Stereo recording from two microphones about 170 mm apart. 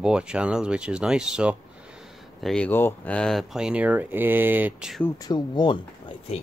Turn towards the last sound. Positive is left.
turn(degrees=30)  # may be behind; listen again after turning